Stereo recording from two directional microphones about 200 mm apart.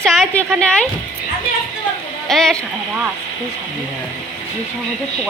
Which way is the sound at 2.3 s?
Centre (ahead or behind).